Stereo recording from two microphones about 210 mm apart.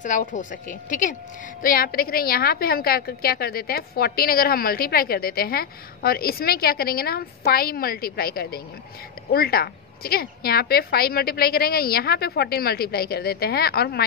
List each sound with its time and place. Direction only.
0.0 s a woman's voice: 40° left (ahead or behind)